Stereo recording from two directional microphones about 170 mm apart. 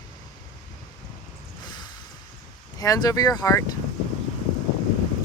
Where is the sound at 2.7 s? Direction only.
20° left (ahead or behind).